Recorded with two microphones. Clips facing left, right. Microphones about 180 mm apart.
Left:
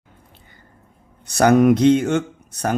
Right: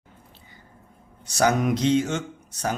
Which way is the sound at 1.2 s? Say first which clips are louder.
Left 8 dB; 60° left (ahead or behind).